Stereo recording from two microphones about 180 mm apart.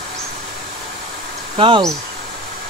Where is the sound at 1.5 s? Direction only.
30° right (ahead or behind).